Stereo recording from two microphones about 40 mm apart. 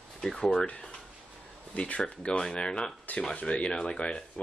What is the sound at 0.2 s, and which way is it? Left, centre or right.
Speech, centre.